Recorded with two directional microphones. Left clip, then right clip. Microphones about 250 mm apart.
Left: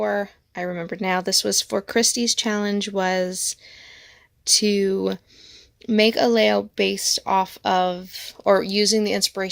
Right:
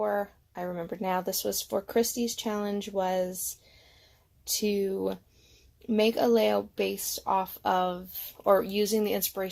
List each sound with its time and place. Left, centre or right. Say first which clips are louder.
0.0 s speech: left 6 dB; left
4.5 s speech: left 9 dB; left